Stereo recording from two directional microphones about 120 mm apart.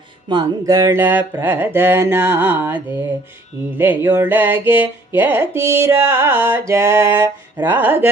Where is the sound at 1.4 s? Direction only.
15° right (ahead or behind).